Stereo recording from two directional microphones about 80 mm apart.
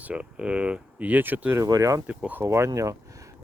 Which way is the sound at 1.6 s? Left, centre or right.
Right.